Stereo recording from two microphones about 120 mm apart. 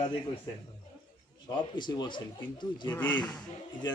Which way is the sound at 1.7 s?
35° left (ahead or behind).